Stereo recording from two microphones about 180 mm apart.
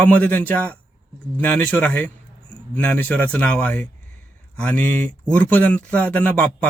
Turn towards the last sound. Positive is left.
turn(degrees=10)  # may be behind; listen again after turning